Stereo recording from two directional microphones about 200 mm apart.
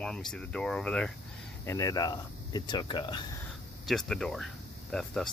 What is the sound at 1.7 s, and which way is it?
Speech, 15° left (ahead or behind).